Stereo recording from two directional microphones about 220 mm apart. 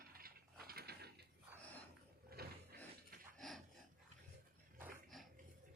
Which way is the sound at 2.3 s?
45° right (ahead or behind).